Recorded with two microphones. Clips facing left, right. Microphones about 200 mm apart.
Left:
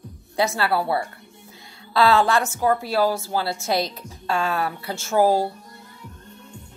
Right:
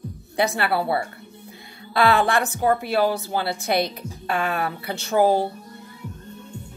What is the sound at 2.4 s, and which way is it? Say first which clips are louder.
Speech: even; 35° right (ahead or behind).